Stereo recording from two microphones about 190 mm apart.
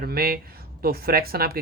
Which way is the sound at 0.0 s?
50° right (ahead or behind).